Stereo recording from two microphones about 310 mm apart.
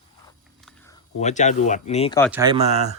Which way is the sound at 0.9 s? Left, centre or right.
Left.